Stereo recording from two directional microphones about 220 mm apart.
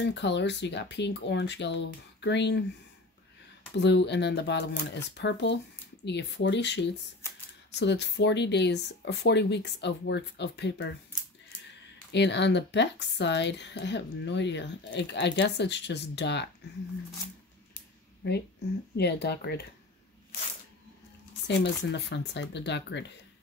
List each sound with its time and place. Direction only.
0.0 s speech: 50° left (ahead or behind)
3.7 s speech: 50° left (ahead or behind)
12.1 s speech: 50° left (ahead or behind)
18.2 s speech: 50° left (ahead or behind)
21.5 s speech: 50° left (ahead or behind)